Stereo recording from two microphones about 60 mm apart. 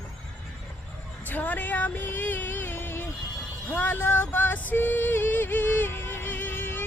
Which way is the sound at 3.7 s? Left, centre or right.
Left.